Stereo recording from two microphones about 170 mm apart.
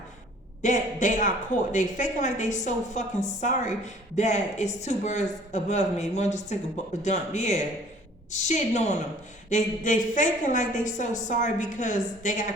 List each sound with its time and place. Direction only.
0.6 s a woman's voice: 45° left (ahead or behind)